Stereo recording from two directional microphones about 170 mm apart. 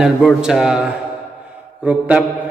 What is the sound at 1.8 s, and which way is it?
Mantra, 5° right (ahead or behind).